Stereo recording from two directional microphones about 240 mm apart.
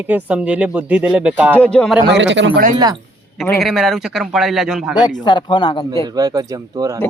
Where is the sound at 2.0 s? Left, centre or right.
Right.